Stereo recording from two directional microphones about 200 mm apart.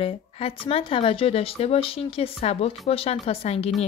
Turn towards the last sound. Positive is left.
turn(degrees=30)  # may be behind; listen again after turning